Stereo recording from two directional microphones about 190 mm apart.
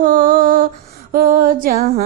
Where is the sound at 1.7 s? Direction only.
35° right (ahead or behind).